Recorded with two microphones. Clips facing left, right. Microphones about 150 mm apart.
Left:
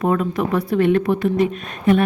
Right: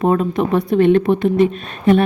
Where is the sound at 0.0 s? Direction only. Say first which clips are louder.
Right 3 dB; 25° right (ahead or behind).